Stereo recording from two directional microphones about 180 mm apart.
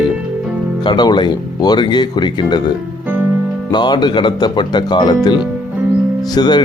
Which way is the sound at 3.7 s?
25° left (ahead or behind).